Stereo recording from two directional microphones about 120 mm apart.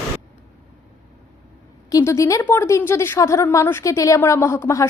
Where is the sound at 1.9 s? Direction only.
25° left (ahead or behind).